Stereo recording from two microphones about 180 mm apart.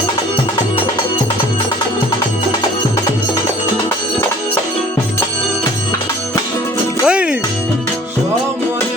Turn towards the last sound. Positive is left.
turn(degrees=-5)  # may be behind; listen again after turning